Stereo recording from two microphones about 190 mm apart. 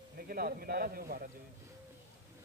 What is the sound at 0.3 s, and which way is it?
Speech, 50° right (ahead or behind).